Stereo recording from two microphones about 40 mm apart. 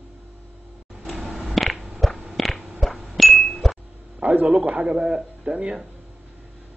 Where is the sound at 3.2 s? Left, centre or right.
Centre.